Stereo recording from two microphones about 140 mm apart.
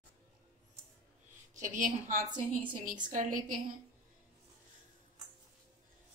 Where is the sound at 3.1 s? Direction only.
75° right (ahead or behind).